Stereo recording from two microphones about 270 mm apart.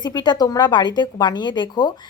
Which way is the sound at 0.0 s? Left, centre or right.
Centre.